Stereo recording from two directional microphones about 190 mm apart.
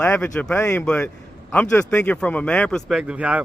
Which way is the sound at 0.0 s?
5° left (ahead or behind).